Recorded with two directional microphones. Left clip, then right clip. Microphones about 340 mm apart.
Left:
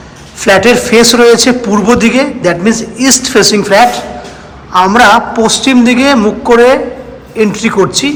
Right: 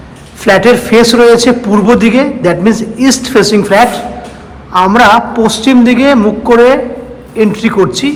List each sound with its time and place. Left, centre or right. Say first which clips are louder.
0.4 s a man's voice: even; centre